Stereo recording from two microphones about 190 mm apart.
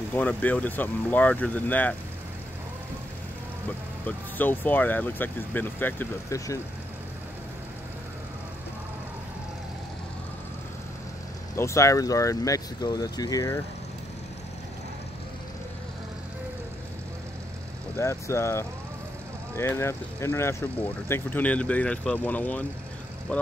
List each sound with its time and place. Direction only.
0.1 s speech: 10° left (ahead or behind)
3.6 s speech: 10° left (ahead or behind)
11.5 s speech: 15° left (ahead or behind)
17.9 s speech: 15° left (ahead or behind)